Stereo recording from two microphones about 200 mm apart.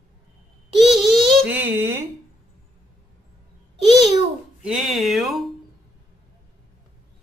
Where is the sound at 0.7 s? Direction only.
Centre (ahead or behind).